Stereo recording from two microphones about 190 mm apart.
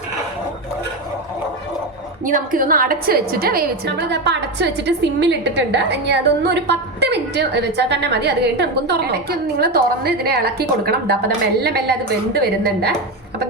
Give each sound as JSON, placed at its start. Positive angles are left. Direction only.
{"t": 2.2, "sound": "a woman's voice", "side_deg": -45}
{"t": 12.3, "sound": "a woman's voice", "side_deg": -60}